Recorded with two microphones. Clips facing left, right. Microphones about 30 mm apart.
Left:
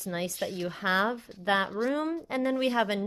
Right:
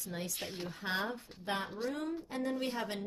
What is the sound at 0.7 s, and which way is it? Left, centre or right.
Speech, left.